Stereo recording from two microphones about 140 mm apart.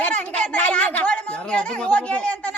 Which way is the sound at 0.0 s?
10° left (ahead or behind).